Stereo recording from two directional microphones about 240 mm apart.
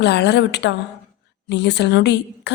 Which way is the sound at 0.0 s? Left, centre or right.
Left.